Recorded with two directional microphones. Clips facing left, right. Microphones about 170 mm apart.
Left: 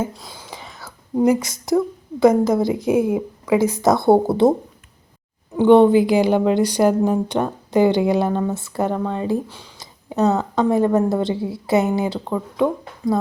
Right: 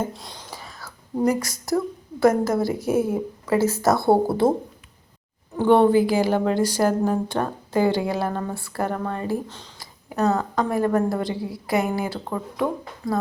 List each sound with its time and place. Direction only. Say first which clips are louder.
0.0 s speech: left 3 dB; centre (ahead or behind)
0.8 s a woman's voice: left 5 dB; 20° left (ahead or behind)
5.5 s a woman's voice: left 4 dB; 20° left (ahead or behind)